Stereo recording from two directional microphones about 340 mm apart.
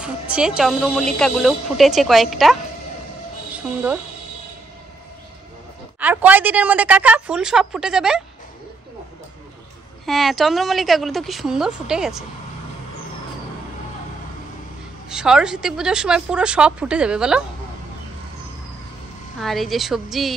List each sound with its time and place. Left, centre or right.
0.0 s speech: centre
3.5 s speech: centre
5.9 s speech: centre
10.0 s speech: centre
15.0 s speech: centre
19.4 s speech: centre